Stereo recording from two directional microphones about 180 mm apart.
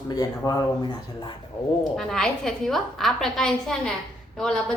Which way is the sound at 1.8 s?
Centre (ahead or behind).